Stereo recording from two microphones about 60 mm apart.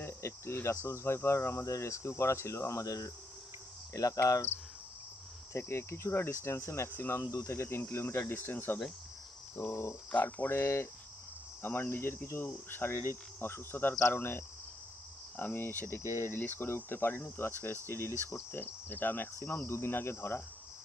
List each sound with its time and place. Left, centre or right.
0.0 s cricket: left
0.8 s speech: left
5.5 s speech: left
9.6 s cricket: left
16.0 s speech: left
16.3 s cricket: left